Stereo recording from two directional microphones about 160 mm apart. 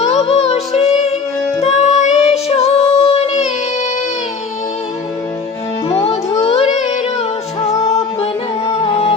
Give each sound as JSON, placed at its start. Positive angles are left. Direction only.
{"t": 0.0, "sound": "music", "side_deg": 40}
{"t": 6.4, "sound": "music", "side_deg": 40}